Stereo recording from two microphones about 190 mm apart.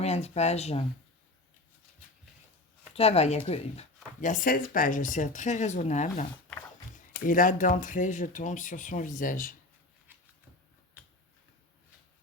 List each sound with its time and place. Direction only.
0.0 s speech: 35° left (ahead or behind)
2.9 s speech: 30° left (ahead or behind)
7.3 s speech: 45° left (ahead or behind)